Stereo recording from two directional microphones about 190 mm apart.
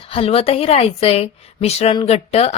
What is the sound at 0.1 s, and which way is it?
A woman's voice, 30° left (ahead or behind).